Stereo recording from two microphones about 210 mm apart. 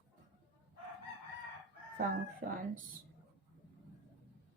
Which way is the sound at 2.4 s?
45° right (ahead or behind).